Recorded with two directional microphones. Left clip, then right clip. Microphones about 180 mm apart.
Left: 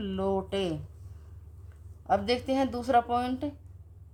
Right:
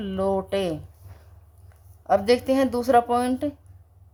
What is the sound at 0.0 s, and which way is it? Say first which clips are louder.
Speech: right 6 dB; 35° right (ahead or behind).